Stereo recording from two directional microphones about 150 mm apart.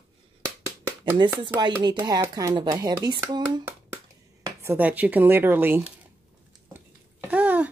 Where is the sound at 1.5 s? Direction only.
30° right (ahead or behind).